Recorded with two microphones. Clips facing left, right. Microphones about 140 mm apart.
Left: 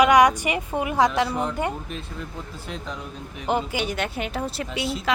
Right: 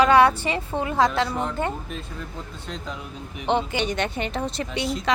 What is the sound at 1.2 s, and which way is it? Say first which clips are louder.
Speech: left 1 dB; centre (ahead or behind).